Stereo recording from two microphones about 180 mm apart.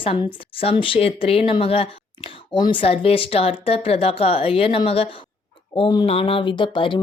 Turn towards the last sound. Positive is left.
turn(degrees=25)  # may be behind; listen again after turning